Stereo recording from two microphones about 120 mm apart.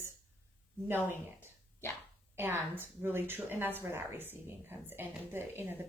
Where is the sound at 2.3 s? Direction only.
20° right (ahead or behind).